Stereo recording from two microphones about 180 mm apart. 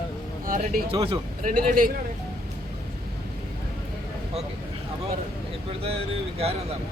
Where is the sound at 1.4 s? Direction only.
50° right (ahead or behind).